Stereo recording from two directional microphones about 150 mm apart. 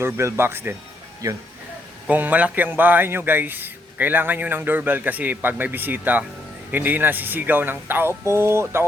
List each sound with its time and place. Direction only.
0.0 s a man's voice: 15° right (ahead or behind)
2.0 s a man's voice: 10° right (ahead or behind)